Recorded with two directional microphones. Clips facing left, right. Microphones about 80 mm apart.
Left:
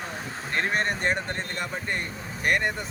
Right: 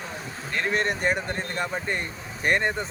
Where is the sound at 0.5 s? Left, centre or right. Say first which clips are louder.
Right 1 dB; left.